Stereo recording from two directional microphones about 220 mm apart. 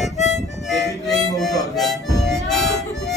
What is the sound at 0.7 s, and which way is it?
Harmonica, centre (ahead or behind).